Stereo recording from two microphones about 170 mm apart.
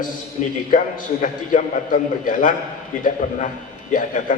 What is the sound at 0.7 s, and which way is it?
A man's voice, 50° left (ahead or behind).